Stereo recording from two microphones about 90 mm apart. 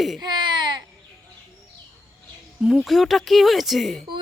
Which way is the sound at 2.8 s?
Centre (ahead or behind).